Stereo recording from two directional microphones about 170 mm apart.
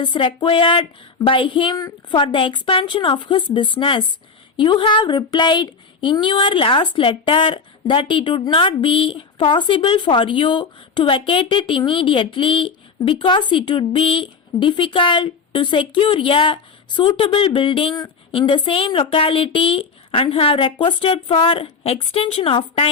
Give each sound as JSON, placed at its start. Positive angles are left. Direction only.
{"t": 0.0, "sound": "speech", "side_deg": 30}